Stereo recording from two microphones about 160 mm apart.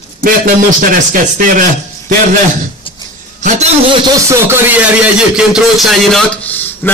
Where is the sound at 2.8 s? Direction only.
30° left (ahead or behind).